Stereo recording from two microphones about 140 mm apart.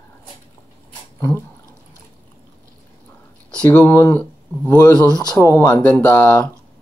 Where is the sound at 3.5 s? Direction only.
10° left (ahead or behind).